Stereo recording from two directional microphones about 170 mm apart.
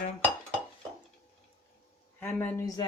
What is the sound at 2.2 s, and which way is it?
Speech, 10° left (ahead or behind).